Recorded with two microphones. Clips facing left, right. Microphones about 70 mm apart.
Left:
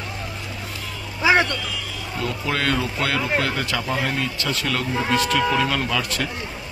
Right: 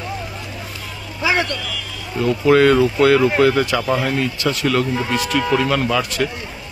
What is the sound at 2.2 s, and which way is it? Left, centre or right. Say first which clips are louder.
Speech: right 12 dB; centre.